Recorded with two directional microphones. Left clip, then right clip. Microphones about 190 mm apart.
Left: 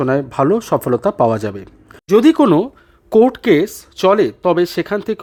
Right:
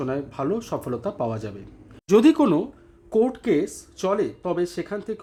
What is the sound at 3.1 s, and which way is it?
Speech, 40° left (ahead or behind).